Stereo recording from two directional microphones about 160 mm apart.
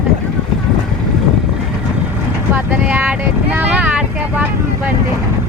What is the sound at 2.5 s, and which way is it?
Vehicle, 10° right (ahead or behind).